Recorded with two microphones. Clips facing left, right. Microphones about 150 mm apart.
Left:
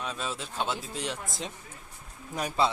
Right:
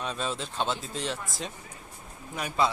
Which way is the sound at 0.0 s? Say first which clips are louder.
Right 3 dB; 5° left (ahead or behind).